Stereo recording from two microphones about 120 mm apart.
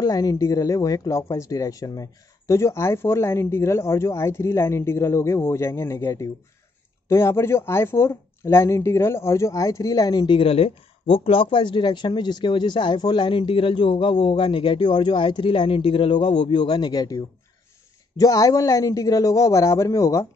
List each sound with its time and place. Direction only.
0.0 s speech: 30° left (ahead or behind)